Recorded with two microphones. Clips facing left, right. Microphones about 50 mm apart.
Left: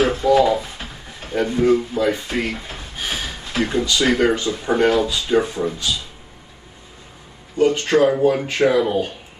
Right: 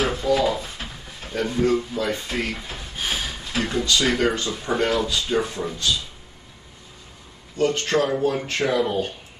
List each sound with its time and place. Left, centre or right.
0.0 s a sound: left
0.4 s drawer open or close: centre
1.3 s speech: centre
7.5 s speech: left